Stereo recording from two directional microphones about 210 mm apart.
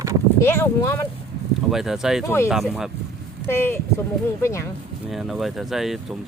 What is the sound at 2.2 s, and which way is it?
Speech, 15° left (ahead or behind).